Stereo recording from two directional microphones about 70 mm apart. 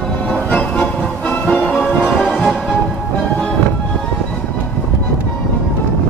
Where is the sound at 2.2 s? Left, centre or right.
Centre.